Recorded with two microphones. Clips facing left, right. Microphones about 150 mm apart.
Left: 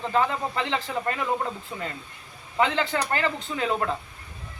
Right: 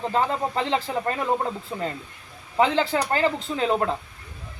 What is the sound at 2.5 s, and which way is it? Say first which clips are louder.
A man's voice: right 3 dB; 35° right (ahead or behind).